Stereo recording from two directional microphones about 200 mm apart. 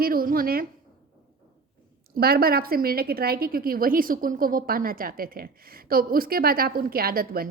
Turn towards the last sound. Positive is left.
turn(degrees=-50)  # may be behind; listen again after turning